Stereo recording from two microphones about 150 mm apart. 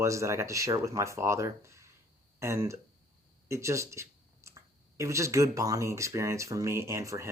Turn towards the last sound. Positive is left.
turn(degrees=-20)  # may be behind; listen again after turning